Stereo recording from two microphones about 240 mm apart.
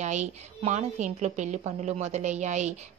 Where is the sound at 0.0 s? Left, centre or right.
Right.